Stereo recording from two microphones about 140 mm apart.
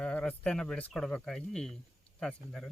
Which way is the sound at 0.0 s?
5° left (ahead or behind).